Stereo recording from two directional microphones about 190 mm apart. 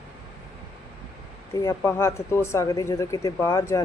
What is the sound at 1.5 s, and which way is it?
Speech, 15° left (ahead or behind).